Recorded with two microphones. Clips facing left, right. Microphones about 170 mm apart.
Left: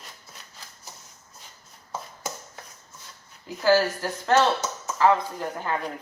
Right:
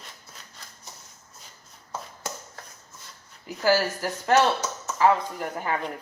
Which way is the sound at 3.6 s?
10° right (ahead or behind).